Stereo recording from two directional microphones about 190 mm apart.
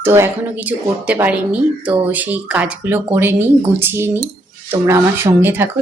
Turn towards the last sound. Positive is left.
turn(degrees=-10)  # may be behind; listen again after turning